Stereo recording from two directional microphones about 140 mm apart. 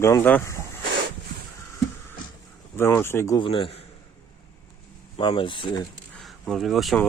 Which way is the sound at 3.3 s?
40° left (ahead or behind).